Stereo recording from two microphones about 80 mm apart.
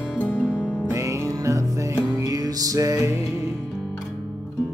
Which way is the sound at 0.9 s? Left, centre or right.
Right.